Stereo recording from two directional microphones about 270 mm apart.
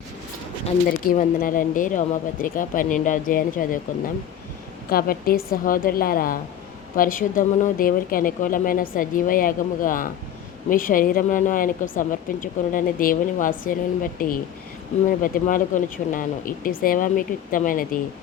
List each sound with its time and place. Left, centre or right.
0.6 s speech: left
4.9 s speech: left